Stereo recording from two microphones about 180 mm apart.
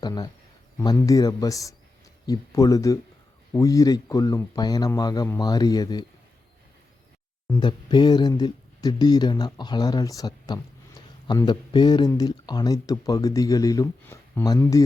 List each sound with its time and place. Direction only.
0.0 s speech: 20° left (ahead or behind)
7.5 s speech: 25° left (ahead or behind)